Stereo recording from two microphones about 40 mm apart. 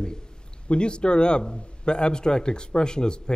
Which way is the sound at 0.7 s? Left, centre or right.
Left.